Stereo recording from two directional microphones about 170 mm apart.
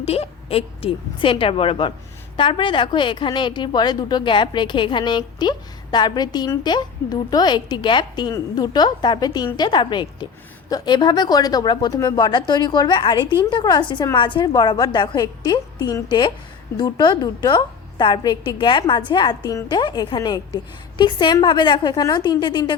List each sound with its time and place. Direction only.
0.0 s a woman's voice: 35° left (ahead or behind)